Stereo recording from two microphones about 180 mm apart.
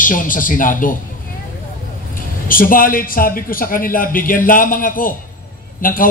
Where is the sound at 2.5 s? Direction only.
50° left (ahead or behind).